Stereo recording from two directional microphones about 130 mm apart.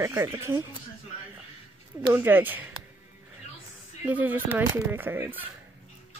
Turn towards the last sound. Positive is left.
turn(degrees=-15)  # may be behind; listen again after turning